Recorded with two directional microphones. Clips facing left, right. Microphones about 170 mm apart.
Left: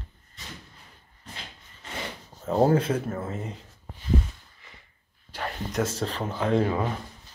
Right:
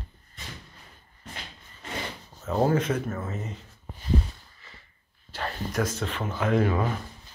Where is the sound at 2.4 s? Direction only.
30° left (ahead or behind).